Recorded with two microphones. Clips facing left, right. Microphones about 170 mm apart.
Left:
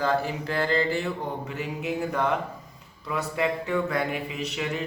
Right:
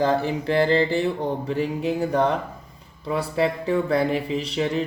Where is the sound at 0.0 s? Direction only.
30° right (ahead or behind).